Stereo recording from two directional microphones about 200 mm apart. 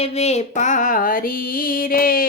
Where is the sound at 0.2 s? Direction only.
35° left (ahead or behind).